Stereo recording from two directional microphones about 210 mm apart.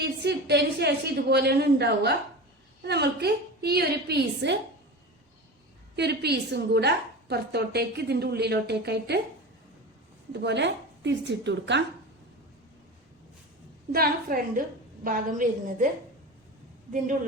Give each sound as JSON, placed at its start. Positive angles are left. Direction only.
{"t": 0.0, "sound": "a woman's voice", "side_deg": -50}
{"t": 6.0, "sound": "a woman's voice", "side_deg": -50}
{"t": 10.4, "sound": "a woman's voice", "side_deg": -55}
{"t": 13.9, "sound": "a woman's voice", "side_deg": -45}